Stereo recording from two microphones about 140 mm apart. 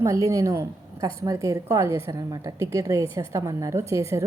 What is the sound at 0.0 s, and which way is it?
A woman's voice, 20° right (ahead or behind).